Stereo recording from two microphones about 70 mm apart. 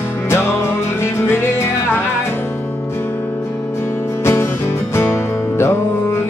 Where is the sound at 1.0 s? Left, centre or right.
Left.